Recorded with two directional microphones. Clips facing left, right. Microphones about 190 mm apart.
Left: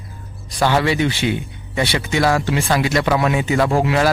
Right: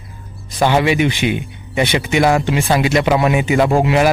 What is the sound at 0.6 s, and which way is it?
Speech, 15° right (ahead or behind).